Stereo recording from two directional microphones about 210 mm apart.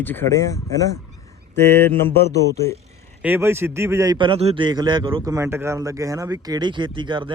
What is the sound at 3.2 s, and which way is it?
A man's voice, 10° right (ahead or behind).